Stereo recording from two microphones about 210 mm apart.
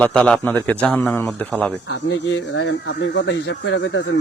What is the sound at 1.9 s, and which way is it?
Speech, 65° left (ahead or behind).